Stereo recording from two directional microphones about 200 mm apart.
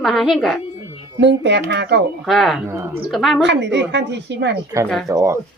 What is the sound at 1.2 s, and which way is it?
Speech, 60° right (ahead or behind).